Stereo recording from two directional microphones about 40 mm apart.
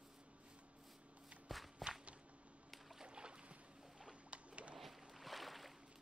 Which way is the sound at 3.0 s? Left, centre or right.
Right.